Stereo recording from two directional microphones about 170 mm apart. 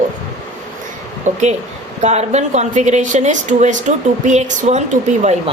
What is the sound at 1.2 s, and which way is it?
Speech, 45° right (ahead or behind).